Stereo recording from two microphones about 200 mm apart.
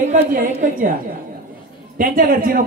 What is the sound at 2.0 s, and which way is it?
Speech, 45° right (ahead or behind).